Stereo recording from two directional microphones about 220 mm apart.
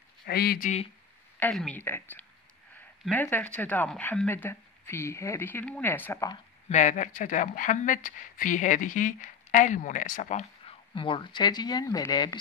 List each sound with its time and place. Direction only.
0.3 s speech: 45° left (ahead or behind)
1.4 s a woman's voice: 5° left (ahead or behind)
6.7 s speech: 35° left (ahead or behind); by 12.4 s 15° left (ahead or behind)